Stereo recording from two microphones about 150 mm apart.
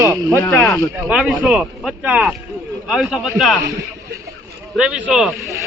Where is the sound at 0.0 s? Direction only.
20° right (ahead or behind).